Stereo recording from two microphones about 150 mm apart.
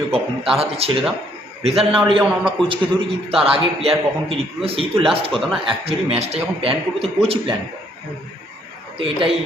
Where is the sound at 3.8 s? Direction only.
40° right (ahead or behind).